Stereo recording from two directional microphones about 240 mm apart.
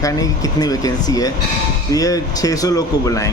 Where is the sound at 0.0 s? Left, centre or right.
Centre.